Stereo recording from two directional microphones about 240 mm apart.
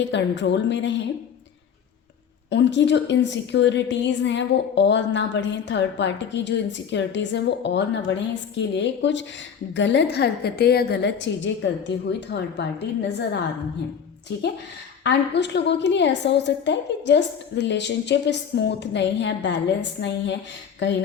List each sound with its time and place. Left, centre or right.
0.0 s a woman's voice: left
2.5 s a woman's voice: left
15.0 s a woman's voice: left